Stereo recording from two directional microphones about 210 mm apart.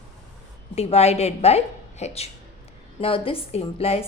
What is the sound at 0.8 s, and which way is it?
A woman's voice, 30° left (ahead or behind).